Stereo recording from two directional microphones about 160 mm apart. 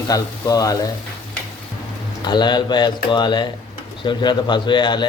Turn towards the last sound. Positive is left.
turn(degrees=30)  # may be behind; listen again after turning